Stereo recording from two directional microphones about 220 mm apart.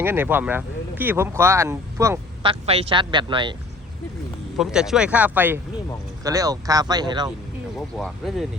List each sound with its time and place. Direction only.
0.0 s speech: 10° right (ahead or behind)
2.5 s speech: 25° right (ahead or behind)
4.5 s speech: centre (ahead or behind); by 7.3 s 20° right (ahead or behind)
7.8 s speech: centre (ahead or behind)